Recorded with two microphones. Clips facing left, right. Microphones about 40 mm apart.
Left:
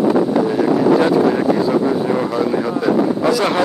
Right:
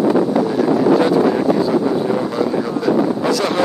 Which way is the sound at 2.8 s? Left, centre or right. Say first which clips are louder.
Left 1 dB; centre.